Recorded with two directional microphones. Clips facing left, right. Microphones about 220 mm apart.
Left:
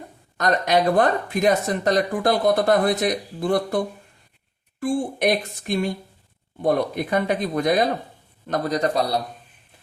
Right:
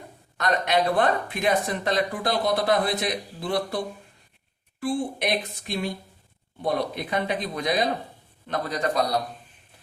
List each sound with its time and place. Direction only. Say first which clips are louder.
0.3 s a man's voice: left 3 dB; 40° left (ahead or behind)